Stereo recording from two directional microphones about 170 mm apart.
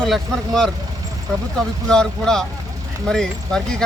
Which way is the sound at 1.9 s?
5° left (ahead or behind).